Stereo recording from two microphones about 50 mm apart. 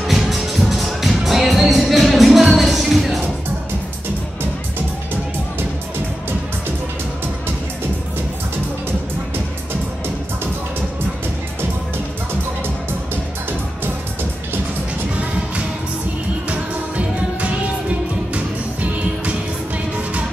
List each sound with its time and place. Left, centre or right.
0.0 s music: centre
16.4 s music: right